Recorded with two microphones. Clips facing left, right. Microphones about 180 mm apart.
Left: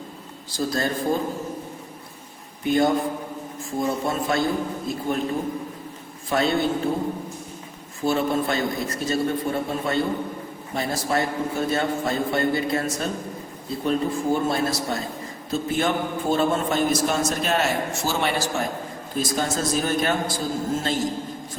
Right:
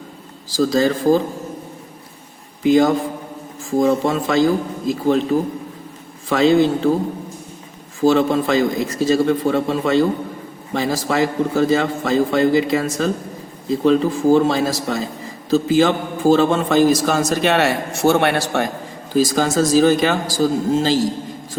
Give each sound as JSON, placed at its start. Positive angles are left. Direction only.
{"t": 0.5, "sound": "a man's voice", "side_deg": -90}
{"t": 2.6, "sound": "a man's voice", "side_deg": -90}
{"t": 8.0, "sound": "a man's voice", "side_deg": -90}
{"t": 19.1, "sound": "a man's voice", "side_deg": -90}